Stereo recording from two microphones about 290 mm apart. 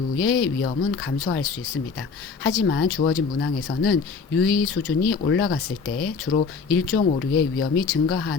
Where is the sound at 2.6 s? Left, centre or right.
Left.